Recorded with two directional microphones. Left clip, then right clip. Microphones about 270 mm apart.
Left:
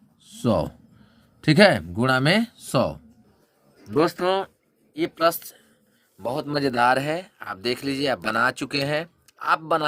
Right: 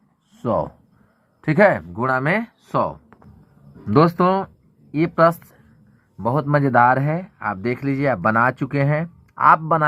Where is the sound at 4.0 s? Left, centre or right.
Left.